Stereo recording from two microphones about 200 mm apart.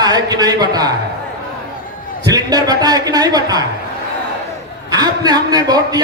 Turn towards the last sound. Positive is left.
turn(degrees=-20)  # may be behind; listen again after turning